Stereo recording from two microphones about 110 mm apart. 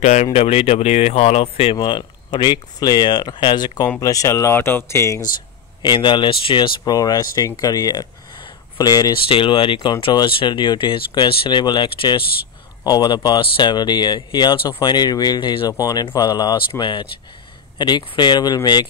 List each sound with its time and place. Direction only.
0.0 s speech: 90° left; by 5.2 s 25° left (ahead or behind)
5.8 s speech: 45° left (ahead or behind)
6.8 s speech: 35° left (ahead or behind)
9.3 s speech: 50° left (ahead or behind)